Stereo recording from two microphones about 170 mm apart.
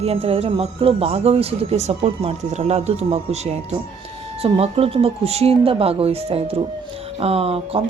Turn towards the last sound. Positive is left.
turn(degrees=-35)  # may be behind; listen again after turning